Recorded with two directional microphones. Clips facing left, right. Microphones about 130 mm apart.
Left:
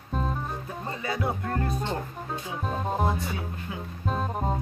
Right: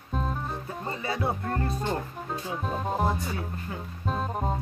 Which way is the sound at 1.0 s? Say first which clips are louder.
Even; 30° right (ahead or behind).